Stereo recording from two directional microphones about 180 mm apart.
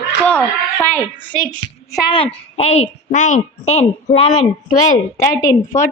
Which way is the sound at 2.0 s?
30° left (ahead or behind).